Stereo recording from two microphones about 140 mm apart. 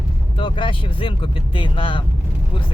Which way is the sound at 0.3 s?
35° left (ahead or behind).